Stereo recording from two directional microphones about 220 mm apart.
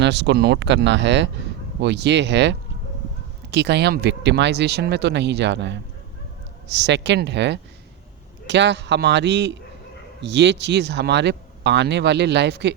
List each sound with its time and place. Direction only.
0.0 s speech: 50° right (ahead or behind)